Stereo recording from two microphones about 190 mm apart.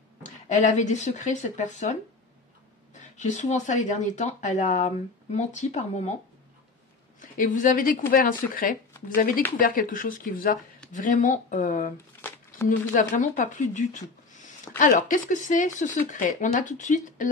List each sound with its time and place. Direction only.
0.2 s speech: 40° left (ahead or behind)
7.2 s speech: 45° left (ahead or behind)